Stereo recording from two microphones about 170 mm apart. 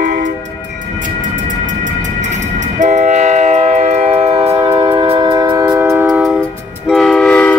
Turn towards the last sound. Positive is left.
turn(degrees=5)  # may be behind; listen again after turning